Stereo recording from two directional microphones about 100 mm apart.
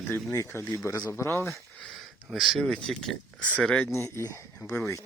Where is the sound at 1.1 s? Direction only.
25° left (ahead or behind).